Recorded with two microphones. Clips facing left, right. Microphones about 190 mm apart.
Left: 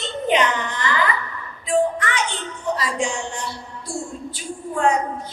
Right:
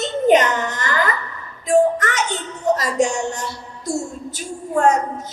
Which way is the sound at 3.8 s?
40° right (ahead or behind).